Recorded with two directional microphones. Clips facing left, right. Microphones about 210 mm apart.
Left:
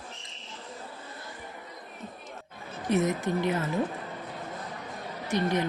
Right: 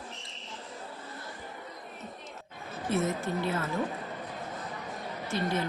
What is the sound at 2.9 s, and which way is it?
Speech, 15° left (ahead or behind).